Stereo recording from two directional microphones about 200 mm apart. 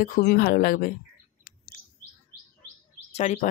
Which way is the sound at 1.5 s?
40° left (ahead or behind).